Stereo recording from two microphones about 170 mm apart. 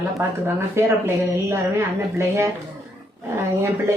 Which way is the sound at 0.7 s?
15° right (ahead or behind).